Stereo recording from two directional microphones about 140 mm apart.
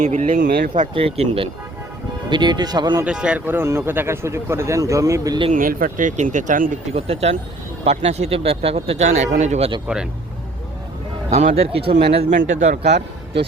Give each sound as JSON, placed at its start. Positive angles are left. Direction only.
{"t": 0.0, "sound": "speech", "side_deg": -65}
{"t": 0.9, "sound": "speech", "side_deg": -45}
{"t": 2.3, "sound": "speech", "side_deg": -30}
{"t": 3.0, "sound": "speech", "side_deg": -5}
{"t": 5.5, "sound": "speech", "side_deg": -80}
{"t": 6.9, "sound": "speech", "side_deg": -45}
{"t": 9.8, "sound": "speech", "side_deg": -5}
{"t": 11.3, "sound": "speech", "side_deg": -50}
{"t": 12.3, "sound": "speech", "side_deg": -60}